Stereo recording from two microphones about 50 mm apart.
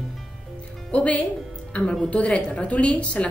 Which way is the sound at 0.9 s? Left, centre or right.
Left.